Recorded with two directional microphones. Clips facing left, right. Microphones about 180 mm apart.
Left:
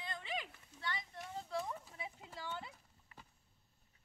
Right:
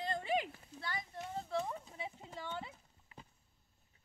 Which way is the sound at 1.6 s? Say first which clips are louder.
Right 3 dB; 20° right (ahead or behind).